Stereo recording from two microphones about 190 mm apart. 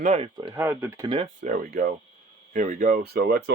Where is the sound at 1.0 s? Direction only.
30° right (ahead or behind).